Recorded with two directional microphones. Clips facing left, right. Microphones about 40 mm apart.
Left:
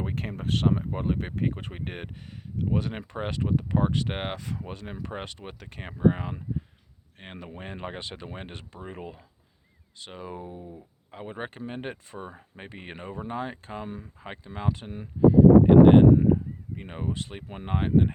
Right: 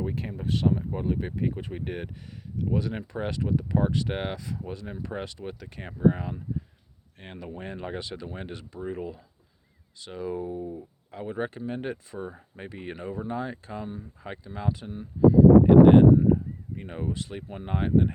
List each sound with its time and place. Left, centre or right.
0.0 s speech: left
0.9 s speech: left
1.5 s speech: left
10.6 s speech: centre
11.1 s speech: left
15.3 s a sound: left
16.7 s speech: left
17.2 s speech: left